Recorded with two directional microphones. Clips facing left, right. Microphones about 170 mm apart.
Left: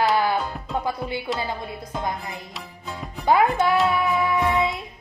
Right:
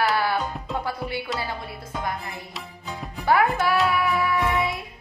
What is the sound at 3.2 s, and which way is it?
Speech, 20° left (ahead or behind).